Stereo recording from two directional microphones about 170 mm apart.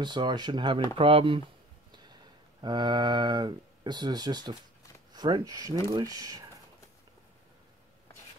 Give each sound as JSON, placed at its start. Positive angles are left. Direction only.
{"t": 0.0, "sound": "speech", "side_deg": -25}